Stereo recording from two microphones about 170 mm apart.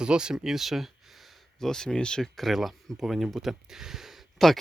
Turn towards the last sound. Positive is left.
turn(degrees=0)  # may be behind; listen again after turning